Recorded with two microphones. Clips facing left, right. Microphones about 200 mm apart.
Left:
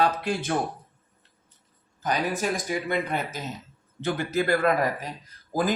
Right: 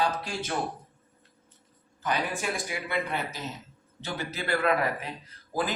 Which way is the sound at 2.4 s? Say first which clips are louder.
Left 5 dB; 40° left (ahead or behind).